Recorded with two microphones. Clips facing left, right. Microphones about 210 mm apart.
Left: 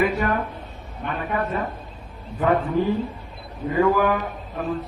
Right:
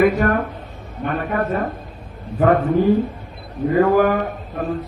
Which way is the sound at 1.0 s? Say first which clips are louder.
Right 5 dB; 50° right (ahead or behind).